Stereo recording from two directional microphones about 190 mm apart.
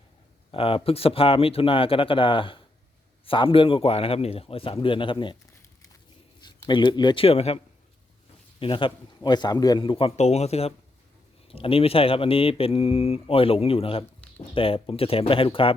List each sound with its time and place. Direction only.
0.5 s speech: 30° left (ahead or behind)
6.4 s speech: 25° left (ahead or behind)